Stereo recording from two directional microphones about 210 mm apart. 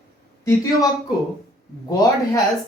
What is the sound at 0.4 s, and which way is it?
Speech, 15° left (ahead or behind).